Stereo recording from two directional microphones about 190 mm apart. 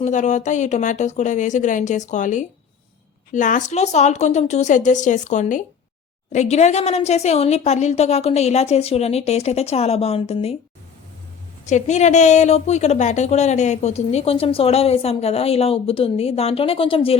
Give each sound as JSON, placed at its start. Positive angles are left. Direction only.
{"t": 0.0, "sound": "a woman's voice", "side_deg": 40}
{"t": 11.6, "sound": "a woman's voice", "side_deg": 40}